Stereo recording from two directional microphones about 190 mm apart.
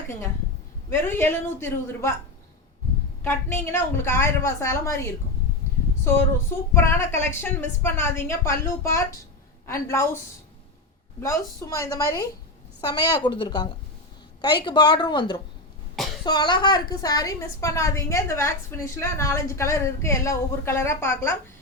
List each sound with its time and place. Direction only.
0.9 s a woman's voice: 15° left (ahead or behind)
3.2 s a woman's voice: 15° left (ahead or behind)
6.7 s a woman's voice: 15° left (ahead or behind)
11.2 s a woman's voice: 15° left (ahead or behind)